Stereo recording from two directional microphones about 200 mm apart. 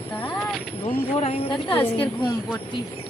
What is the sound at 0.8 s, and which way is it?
Speech, 30° left (ahead or behind).